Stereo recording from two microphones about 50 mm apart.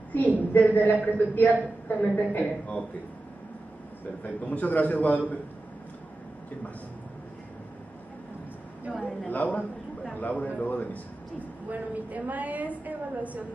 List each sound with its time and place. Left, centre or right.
0.1 s a woman's voice: left
4.2 s a woman's voice: left
9.3 s a man's voice: left
11.7 s a woman's voice: right